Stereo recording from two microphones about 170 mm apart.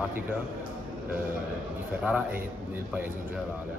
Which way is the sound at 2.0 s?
10° right (ahead or behind).